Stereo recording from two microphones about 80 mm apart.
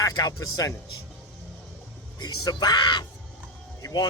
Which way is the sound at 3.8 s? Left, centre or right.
Left.